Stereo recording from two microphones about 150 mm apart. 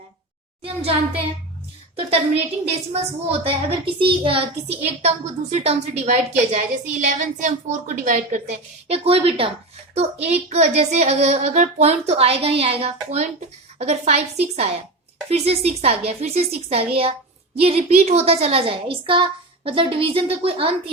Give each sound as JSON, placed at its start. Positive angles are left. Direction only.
{"t": 0.6, "sound": "a woman's voice", "side_deg": -40}
{"t": 3.4, "sound": "a woman's voice", "side_deg": -40}
{"t": 8.9, "sound": "a woman's voice", "side_deg": -40}